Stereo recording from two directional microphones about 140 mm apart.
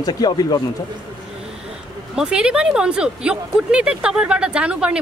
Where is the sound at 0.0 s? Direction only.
30° left (ahead or behind).